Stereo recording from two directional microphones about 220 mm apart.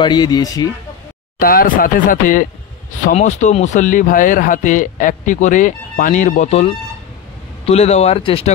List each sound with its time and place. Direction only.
0.0 s speech: 20° left (ahead or behind)
1.4 s speech: 40° left (ahead or behind); by 8.5 s 25° left (ahead or behind)